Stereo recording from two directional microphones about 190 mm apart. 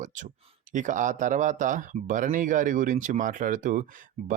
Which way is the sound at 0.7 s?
40° right (ahead or behind).